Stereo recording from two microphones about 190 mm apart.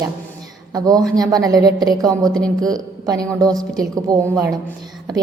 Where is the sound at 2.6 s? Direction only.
20° right (ahead or behind).